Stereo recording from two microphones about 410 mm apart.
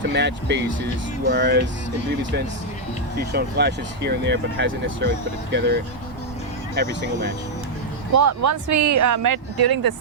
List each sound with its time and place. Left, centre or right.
0.0 s speech: right
3.2 s speech: right
8.1 s speech: right